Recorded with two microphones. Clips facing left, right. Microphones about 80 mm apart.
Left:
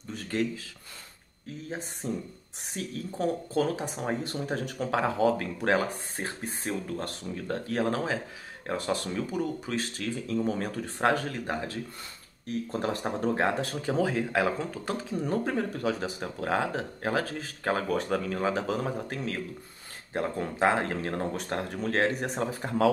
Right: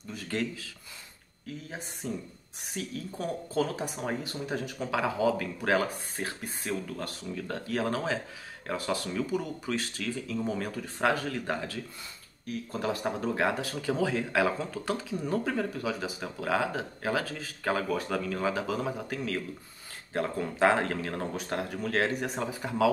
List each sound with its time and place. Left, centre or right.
2.0 s speech: left
20.3 s speech: left
21.4 s speech: left
22.5 s speech: left